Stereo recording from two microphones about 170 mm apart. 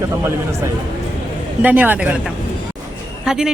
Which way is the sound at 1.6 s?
10° right (ahead or behind).